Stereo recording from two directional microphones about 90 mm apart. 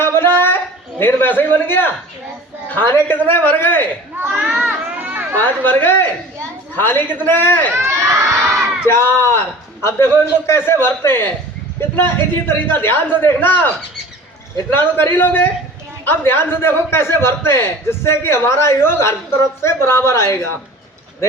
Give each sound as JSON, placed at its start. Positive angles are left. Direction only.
{"t": 0.0, "sound": "a sound", "side_deg": 25}
{"t": 2.6, "sound": "a man's voice", "side_deg": 20}
{"t": 4.2, "sound": "children playing", "side_deg": -25}
{"t": 5.4, "sound": "a man's voice", "side_deg": 20}
{"t": 7.7, "sound": "crowd", "side_deg": -30}
{"t": 8.9, "sound": "a man's voice", "side_deg": 25}
{"t": 12.5, "sound": "a man's voice", "side_deg": 25}